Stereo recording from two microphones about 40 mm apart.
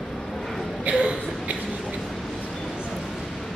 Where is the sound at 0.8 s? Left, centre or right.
Right.